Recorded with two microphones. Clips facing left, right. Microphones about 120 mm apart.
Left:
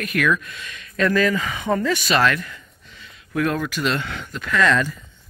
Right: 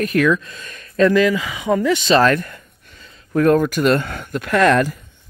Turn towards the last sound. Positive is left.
turn(degrees=-55)  # may be behind; listen again after turning